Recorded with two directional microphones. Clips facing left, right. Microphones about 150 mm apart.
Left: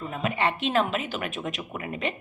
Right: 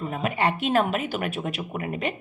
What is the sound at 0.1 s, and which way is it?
A woman's voice, 45° right (ahead or behind).